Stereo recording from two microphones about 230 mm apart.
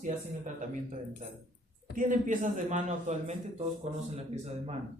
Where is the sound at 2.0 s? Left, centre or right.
Right.